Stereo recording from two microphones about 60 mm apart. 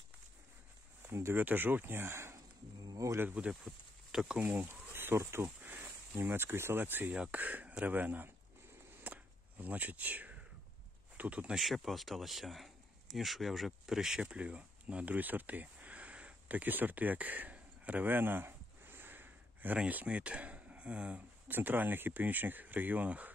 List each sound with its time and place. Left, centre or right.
1.0 s speech: right
1.4 s speech: right
2.8 s a sound: right
3.3 s speech: centre
4.4 s speech: right
4.6 s a sound: right
5.1 s speech: right
5.6 s speech: right
9.0 s a sound: right
11.1 s speech: right
11.5 s speech: centre
21.5 s speech: right